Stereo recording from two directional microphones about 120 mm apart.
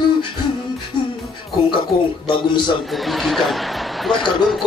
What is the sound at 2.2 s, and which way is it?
Speech, 40° left (ahead or behind).